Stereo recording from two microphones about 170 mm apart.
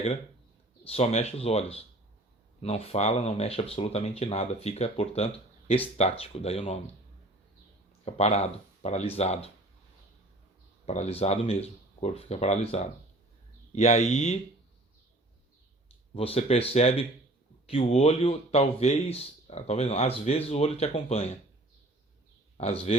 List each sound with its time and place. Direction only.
0.9 s speech: 40° left (ahead or behind)
8.0 s speech: 40° left (ahead or behind)
10.8 s speech: 40° left (ahead or behind)
16.1 s speech: 35° left (ahead or behind)
22.5 s speech: 35° left (ahead or behind)